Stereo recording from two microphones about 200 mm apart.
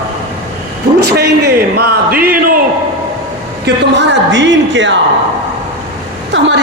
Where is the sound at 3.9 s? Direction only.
65° right (ahead or behind).